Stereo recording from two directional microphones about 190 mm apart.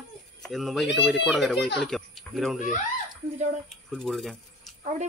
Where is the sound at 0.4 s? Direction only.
Centre (ahead or behind).